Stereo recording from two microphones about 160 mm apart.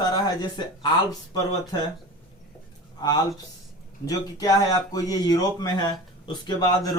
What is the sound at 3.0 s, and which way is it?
Speech, 25° left (ahead or behind).